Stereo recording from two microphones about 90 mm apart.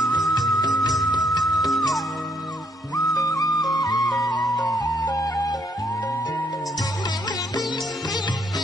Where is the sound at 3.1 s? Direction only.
40° left (ahead or behind).